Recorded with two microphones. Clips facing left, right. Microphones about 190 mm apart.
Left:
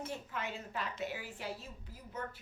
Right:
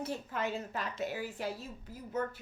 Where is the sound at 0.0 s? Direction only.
35° right (ahead or behind).